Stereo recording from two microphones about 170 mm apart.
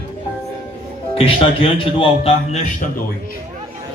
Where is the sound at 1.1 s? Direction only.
35° left (ahead or behind).